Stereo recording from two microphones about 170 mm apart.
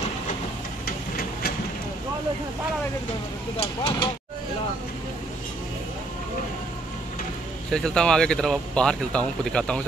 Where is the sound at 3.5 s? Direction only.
35° left (ahead or behind).